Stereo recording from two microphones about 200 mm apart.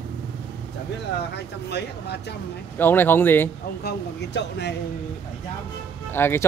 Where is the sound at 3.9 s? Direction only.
60° left (ahead or behind).